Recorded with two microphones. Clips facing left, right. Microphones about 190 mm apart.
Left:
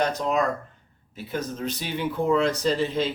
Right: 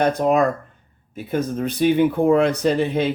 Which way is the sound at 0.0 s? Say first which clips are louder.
Right 6 dB; 55° right (ahead or behind).